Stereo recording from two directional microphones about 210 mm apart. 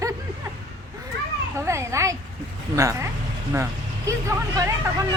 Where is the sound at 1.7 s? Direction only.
15° right (ahead or behind).